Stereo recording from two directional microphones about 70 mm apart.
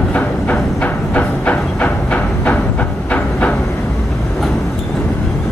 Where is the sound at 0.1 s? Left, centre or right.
Centre.